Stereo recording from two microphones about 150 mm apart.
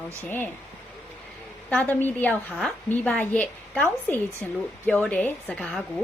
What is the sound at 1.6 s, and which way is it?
A woman's voice, 10° left (ahead or behind).